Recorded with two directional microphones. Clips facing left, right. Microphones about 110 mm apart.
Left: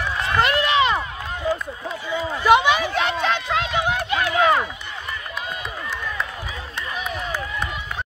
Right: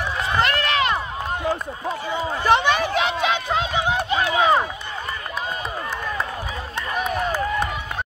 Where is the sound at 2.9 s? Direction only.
10° right (ahead or behind).